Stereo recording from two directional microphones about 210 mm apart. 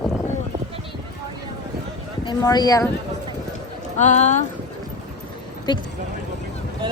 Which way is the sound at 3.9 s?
35° left (ahead or behind).